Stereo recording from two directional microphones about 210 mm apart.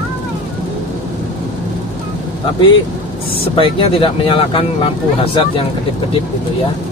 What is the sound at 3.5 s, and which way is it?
Speech, 25° left (ahead or behind).